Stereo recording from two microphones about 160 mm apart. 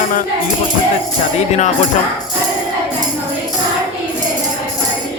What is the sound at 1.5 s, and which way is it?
Speech, 45° left (ahead or behind).